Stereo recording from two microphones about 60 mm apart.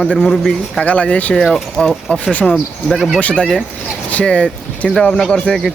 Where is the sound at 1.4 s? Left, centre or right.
Centre.